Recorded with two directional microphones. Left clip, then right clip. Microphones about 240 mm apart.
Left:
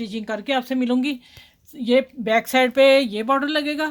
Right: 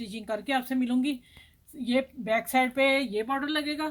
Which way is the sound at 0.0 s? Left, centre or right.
Left.